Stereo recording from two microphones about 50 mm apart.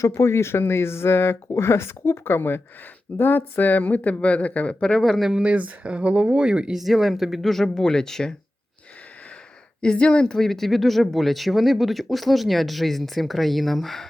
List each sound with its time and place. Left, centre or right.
0.0 s speech: left
4.9 s speech: centre
5.3 s speech: right
6.7 s speech: centre
9.8 s speech: centre